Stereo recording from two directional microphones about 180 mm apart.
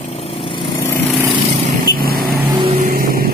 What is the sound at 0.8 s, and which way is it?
Vehicle, 15° left (ahead or behind).